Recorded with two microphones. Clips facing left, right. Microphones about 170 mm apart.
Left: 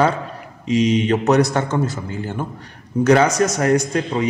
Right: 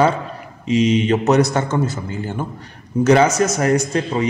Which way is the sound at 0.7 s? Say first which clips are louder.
Right 1 dB; centre (ahead or behind).